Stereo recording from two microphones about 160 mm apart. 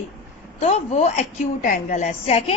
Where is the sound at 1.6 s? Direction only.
55° left (ahead or behind).